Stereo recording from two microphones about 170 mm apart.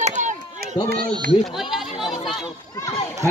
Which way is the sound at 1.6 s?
Centre (ahead or behind).